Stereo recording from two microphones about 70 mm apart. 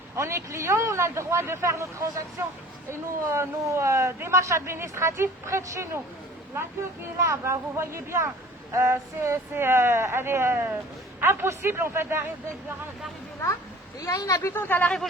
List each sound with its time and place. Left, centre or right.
0.2 s speech: right
7.3 s speech: right
14.0 s speech: left